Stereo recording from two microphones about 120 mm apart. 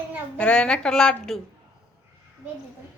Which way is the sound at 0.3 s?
10° left (ahead or behind).